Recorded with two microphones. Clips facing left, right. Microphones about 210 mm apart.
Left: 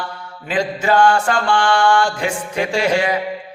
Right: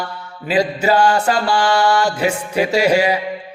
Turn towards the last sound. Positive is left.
turn(degrees=-10)  # may be behind; listen again after turning